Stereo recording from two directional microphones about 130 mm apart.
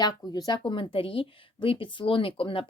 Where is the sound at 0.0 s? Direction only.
30° left (ahead or behind).